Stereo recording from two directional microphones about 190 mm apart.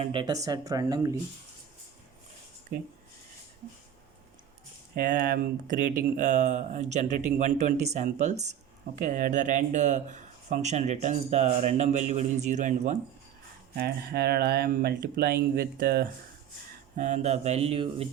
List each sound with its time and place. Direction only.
0.0 s speech: 25° right (ahead or behind)
4.9 s speech: 50° right (ahead or behind)
13.7 s speech: 55° right (ahead or behind)
17.0 s speech: 40° right (ahead or behind)